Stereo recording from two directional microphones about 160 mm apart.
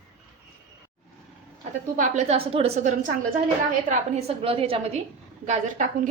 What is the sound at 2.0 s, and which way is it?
A woman's voice, 45° right (ahead or behind).